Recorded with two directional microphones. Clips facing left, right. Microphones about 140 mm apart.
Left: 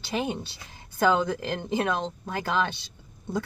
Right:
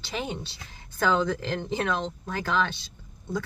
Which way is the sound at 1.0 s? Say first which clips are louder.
Left 1 dB; 10° left (ahead or behind).